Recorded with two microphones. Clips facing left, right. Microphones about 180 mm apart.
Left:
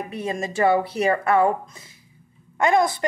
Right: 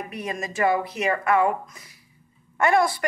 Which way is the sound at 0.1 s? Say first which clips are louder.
Left 4 dB; 25° left (ahead or behind).